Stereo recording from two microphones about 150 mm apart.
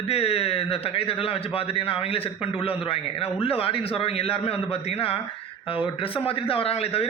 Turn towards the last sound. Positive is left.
turn(degrees=40)  # may be behind; listen again after turning